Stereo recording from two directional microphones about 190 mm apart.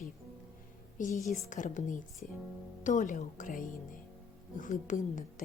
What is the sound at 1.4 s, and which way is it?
Speech, 40° left (ahead or behind).